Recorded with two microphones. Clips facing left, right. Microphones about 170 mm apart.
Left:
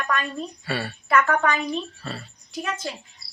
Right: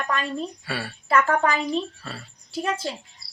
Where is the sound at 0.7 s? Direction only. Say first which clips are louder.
Left 3 dB; 10° right (ahead or behind).